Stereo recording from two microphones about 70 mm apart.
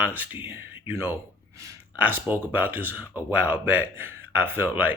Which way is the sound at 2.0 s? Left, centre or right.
Right.